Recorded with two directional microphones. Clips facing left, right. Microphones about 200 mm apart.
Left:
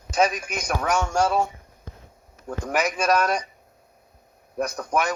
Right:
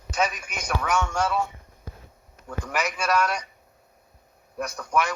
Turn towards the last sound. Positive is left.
turn(degrees=45)  # may be behind; listen again after turning